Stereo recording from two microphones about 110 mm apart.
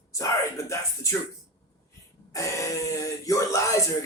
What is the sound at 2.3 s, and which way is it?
Speech, 25° left (ahead or behind).